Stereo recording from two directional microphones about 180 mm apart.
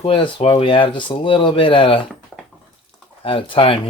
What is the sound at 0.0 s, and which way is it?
Speech, 30° left (ahead or behind).